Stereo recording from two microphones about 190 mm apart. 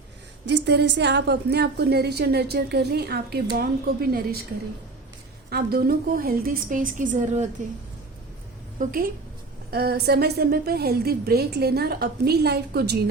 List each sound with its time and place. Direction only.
0.4 s a woman's voice: 65° right (ahead or behind)
5.5 s a woman's voice: 55° right (ahead or behind)
8.8 s a woman's voice: 50° right (ahead or behind)